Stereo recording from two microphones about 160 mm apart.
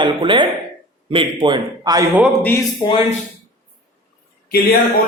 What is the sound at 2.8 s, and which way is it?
Speech, 30° left (ahead or behind).